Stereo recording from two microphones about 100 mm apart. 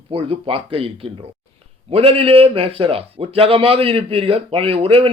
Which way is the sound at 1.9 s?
75° right (ahead or behind).